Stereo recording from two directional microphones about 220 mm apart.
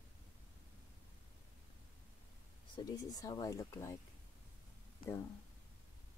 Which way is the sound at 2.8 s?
15° left (ahead or behind).